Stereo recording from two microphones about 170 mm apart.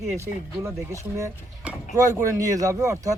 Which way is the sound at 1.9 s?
20° right (ahead or behind).